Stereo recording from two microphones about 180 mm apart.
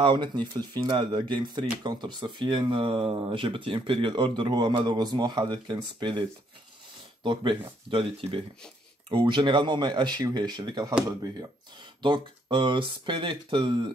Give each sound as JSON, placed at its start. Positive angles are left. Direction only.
{"t": 0.0, "sound": "speech", "side_deg": -25}
{"t": 7.2, "sound": "speech", "side_deg": -30}
{"t": 12.0, "sound": "speech", "side_deg": -25}